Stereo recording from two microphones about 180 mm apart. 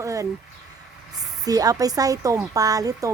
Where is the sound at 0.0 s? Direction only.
15° right (ahead or behind).